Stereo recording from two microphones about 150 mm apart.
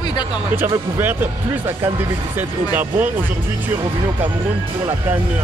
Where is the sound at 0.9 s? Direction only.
15° right (ahead or behind).